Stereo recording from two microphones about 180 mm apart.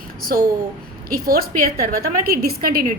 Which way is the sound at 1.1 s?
55° right (ahead or behind).